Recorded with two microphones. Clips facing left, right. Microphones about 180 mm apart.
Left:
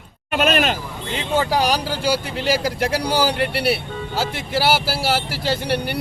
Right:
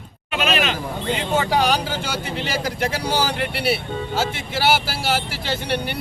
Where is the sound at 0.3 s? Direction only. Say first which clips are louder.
Left 3 dB; 50° left (ahead or behind).